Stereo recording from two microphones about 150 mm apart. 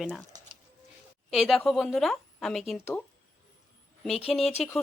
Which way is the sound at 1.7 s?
Centre (ahead or behind).